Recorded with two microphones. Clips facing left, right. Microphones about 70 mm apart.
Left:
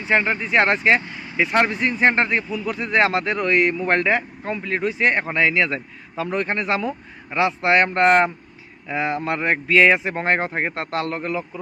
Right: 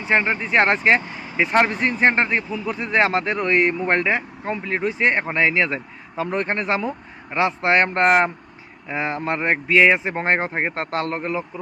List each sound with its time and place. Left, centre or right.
0.1 s speech: centre
1.4 s speech: centre
1.8 s speech: right
10.8 s a man's voice: right